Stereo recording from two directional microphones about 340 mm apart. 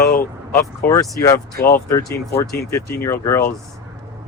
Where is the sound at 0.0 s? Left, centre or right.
Left.